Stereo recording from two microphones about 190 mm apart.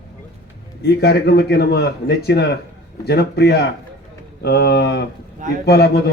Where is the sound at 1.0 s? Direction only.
60° left (ahead or behind).